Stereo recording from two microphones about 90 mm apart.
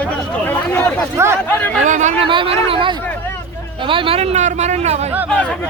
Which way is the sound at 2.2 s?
80° right.